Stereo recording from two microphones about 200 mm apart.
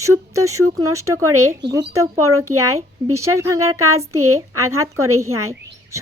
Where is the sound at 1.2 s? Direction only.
90° right.